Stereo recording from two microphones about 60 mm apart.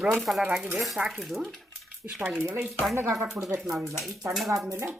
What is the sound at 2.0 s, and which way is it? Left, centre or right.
Speech, right.